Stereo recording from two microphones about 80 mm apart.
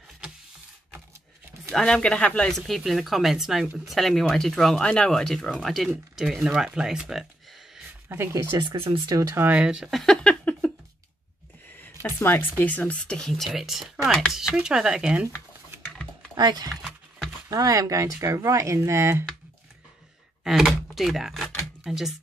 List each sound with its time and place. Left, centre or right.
1.7 s speech: centre
8.1 s speech: right
8.5 s speech: right
9.3 s speech: right
9.6 s speech: centre
9.8 s speech: centre
10.2 s a sound: centre
11.8 s speech: left; by 15.1 s centre
16.3 s speech: right
17.5 s speech: right
20.4 s speech: centre